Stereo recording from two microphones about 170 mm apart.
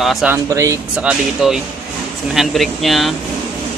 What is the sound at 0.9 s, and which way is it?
Speech, 5° right (ahead or behind).